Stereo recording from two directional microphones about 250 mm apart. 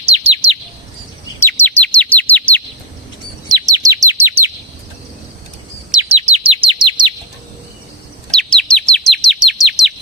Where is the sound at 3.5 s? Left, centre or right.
Centre.